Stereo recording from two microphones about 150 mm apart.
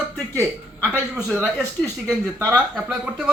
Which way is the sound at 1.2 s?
Centre (ahead or behind).